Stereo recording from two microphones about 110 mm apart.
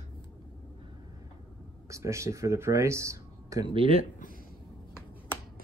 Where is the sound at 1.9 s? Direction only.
25° right (ahead or behind).